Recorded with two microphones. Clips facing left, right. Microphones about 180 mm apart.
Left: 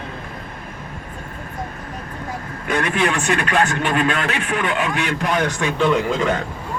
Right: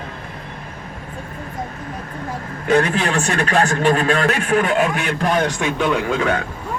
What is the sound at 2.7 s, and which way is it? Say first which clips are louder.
Speech: right 3 dB; 35° right (ahead or behind).